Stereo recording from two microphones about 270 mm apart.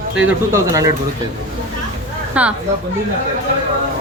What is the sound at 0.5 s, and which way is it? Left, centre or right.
Speech, centre.